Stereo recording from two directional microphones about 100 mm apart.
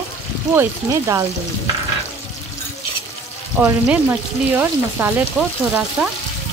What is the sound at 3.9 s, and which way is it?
Frying, 15° right (ahead or behind).